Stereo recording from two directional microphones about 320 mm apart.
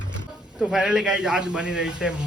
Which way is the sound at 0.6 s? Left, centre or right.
Centre.